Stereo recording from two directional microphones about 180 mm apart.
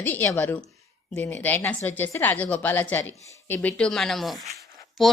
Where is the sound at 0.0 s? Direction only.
10° left (ahead or behind).